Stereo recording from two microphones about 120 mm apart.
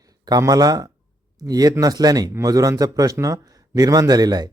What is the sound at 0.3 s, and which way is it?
A man's voice, 30° right (ahead or behind).